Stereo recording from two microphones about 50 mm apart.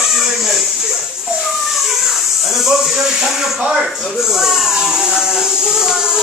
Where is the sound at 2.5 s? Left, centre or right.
Centre.